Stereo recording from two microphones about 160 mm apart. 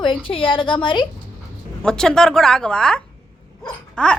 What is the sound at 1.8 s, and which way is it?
A woman's voice, 5° left (ahead or behind).